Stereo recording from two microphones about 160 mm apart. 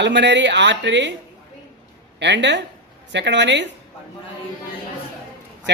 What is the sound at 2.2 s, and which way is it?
Speech, 90° right.